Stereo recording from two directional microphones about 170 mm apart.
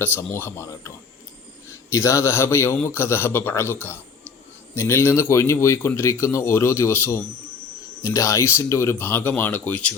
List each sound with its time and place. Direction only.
0.0 s a man's voice: 10° left (ahead or behind)